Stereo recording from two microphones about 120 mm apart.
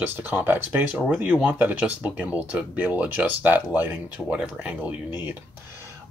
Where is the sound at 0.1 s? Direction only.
15° right (ahead or behind).